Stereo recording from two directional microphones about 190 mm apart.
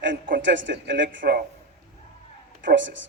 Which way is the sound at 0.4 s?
70° right (ahead or behind).